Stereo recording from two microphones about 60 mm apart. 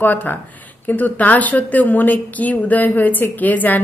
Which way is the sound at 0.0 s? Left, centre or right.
Left.